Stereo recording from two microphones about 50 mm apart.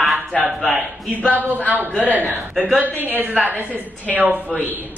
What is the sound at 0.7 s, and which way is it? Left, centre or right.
Speech, right.